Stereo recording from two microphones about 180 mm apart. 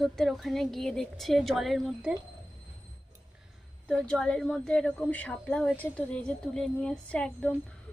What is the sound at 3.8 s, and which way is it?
A woman's voice, 5° left (ahead or behind).